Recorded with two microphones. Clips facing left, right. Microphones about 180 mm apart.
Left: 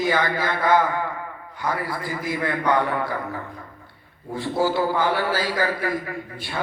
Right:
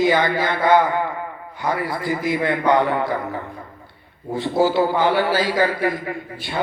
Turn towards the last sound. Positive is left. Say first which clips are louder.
# right 3 dB
turn(degrees=-25)  # may be behind; listen again after turning